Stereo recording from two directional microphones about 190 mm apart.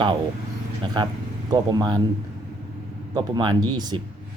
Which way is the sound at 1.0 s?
25° right (ahead or behind).